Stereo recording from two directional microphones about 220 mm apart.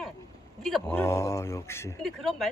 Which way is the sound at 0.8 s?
10° left (ahead or behind).